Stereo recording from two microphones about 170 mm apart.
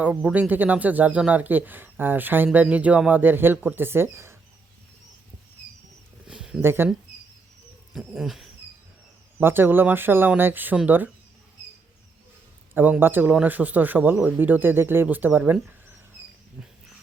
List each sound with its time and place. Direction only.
0.0 s speech: 5° right (ahead or behind)
6.2 s a sound: 5° right (ahead or behind)
7.9 s dog: centre (ahead or behind)
9.4 s speech: 15° right (ahead or behind)
12.7 s speech: 10° right (ahead or behind)